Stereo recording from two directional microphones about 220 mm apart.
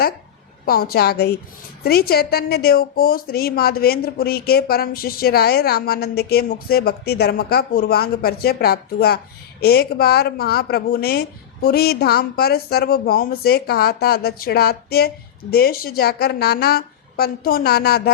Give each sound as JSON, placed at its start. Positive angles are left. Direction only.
{"t": 0.6, "sound": "a woman's voice", "side_deg": 40}